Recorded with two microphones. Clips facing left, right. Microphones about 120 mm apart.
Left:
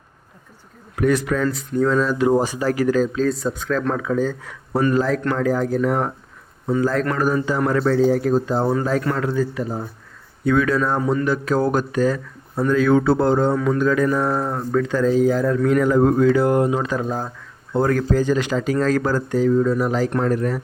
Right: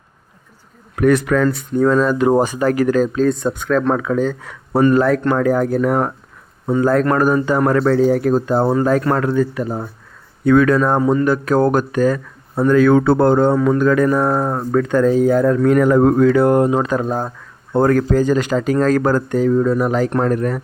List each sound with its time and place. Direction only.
0.9 s speech: 55° right (ahead or behind)
8.7 s speech: 50° right (ahead or behind)
11.0 s speech: 35° right (ahead or behind)
11.3 s speech: 55° right (ahead or behind)